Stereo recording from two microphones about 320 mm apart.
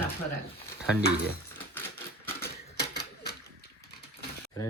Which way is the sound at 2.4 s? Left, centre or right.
Left.